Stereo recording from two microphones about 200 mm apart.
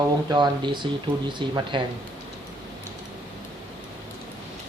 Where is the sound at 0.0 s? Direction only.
20° right (ahead or behind).